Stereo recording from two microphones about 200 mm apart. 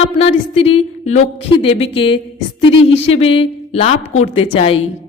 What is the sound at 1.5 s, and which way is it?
A woman's voice, 30° left (ahead or behind).